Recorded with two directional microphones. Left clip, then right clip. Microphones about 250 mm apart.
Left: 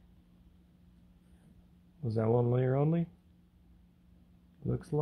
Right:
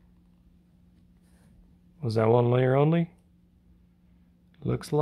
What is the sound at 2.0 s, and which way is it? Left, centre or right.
Speech, right.